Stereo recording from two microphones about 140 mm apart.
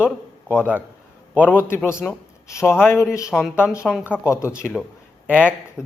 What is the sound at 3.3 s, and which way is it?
Speech, 5° right (ahead or behind).